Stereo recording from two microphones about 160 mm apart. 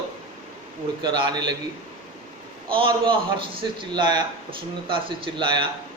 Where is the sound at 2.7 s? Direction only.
30° right (ahead or behind).